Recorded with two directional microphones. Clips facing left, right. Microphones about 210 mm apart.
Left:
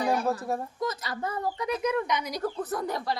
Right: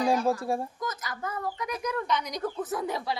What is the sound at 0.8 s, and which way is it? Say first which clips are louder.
A woman's voice: left 4 dB; 30° left (ahead or behind).